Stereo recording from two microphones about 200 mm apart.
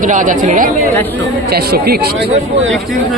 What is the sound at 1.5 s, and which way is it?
Speech, 50° right (ahead or behind).